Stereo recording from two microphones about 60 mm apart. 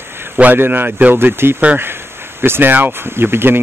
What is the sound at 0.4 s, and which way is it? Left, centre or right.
Speech, right.